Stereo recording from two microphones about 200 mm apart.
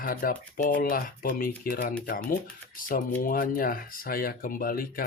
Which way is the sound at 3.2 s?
45° left (ahead or behind).